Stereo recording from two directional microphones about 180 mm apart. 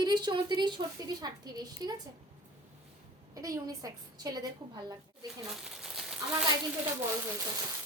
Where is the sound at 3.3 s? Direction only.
20° right (ahead or behind).